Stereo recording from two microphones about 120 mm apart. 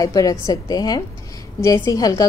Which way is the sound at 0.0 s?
30° left (ahead or behind).